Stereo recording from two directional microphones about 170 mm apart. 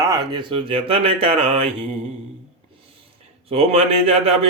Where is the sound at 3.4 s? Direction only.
35° right (ahead or behind).